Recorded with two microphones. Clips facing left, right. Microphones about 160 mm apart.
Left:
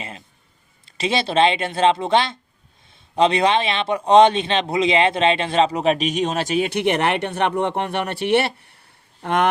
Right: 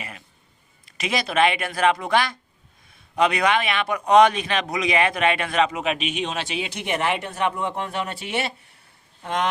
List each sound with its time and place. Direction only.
0.9 s speech: 30° left (ahead or behind)
6.7 s speech: 65° left (ahead or behind)